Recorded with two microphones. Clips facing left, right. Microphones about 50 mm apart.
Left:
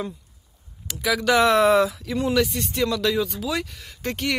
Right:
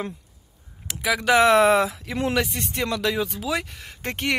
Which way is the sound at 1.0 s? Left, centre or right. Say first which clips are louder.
Right 1 dB; right.